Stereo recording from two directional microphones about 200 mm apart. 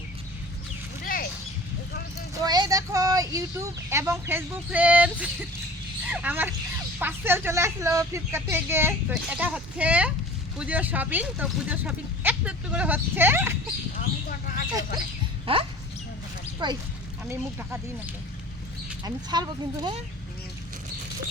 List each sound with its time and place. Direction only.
1.0 s a sound: 45° left (ahead or behind)
2.4 s speech: 20° right (ahead or behind)
13.9 s a sound: 45° left (ahead or behind)
15.5 s speech: 25° right (ahead or behind)
17.2 s speech: 10° right (ahead or behind)
19.0 s speech: 20° right (ahead or behind)